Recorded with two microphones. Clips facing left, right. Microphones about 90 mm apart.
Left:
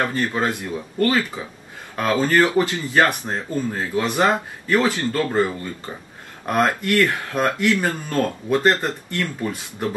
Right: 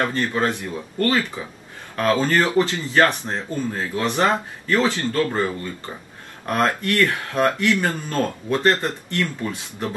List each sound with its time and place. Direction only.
0.1 s speech: 15° left (ahead or behind)
6.4 s speech: 20° left (ahead or behind)